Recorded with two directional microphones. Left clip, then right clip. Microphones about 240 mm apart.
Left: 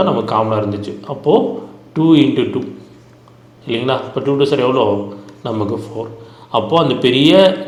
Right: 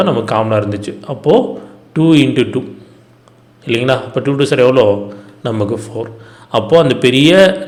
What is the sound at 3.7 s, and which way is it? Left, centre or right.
A man's voice, right.